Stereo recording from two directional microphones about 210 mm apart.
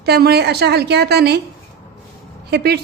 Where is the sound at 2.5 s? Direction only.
50° right (ahead or behind).